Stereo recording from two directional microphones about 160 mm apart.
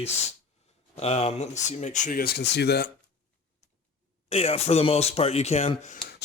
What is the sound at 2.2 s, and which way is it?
Speech, 85° left.